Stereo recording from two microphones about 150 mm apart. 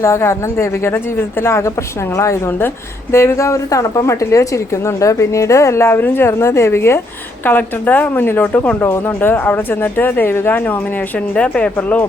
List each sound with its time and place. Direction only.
0.0 s a woman's voice: 20° left (ahead or behind)